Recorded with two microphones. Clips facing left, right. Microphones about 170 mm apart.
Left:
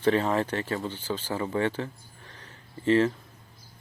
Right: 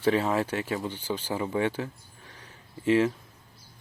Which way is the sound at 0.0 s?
10° right (ahead or behind).